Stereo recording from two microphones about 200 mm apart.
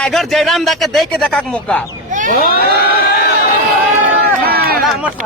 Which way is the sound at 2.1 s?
40° right (ahead or behind).